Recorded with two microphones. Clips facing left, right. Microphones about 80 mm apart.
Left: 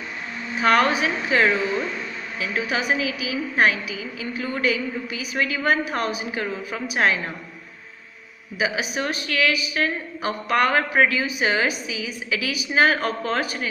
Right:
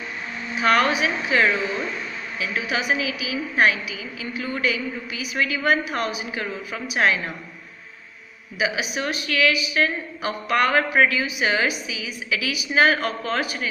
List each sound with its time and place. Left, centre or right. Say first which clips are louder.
0.6 s a woman's voice: left 1 dB; left
8.5 s a woman's voice: even; left